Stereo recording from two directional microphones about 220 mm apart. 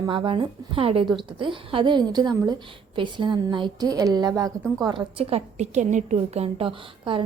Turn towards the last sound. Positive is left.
turn(degrees=-25)  # may be behind; listen again after turning